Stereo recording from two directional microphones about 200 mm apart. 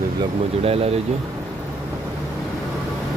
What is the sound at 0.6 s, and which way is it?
Speech, 30° right (ahead or behind).